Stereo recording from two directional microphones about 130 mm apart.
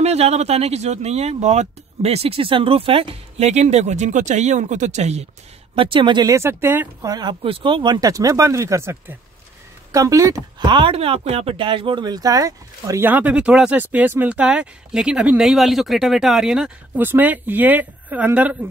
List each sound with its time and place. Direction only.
0.0 s speech: 55° right (ahead or behind)
5.8 s speech: 40° right (ahead or behind)
6.3 s speech: 20° right (ahead or behind)
7.1 s speech: 30° right (ahead or behind)
7.4 s speech: 40° right (ahead or behind); by 10.4 s 25° right (ahead or behind)
10.6 s speech: 40° right (ahead or behind); by 18.6 s 10° right (ahead or behind)